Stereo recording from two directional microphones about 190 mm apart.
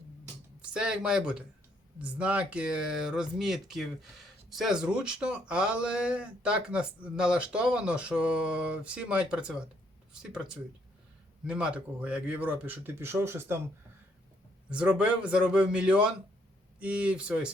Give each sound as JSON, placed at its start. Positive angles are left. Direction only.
{"t": 0.6, "sound": "speech", "side_deg": -5}
{"t": 14.7, "sound": "speech", "side_deg": -5}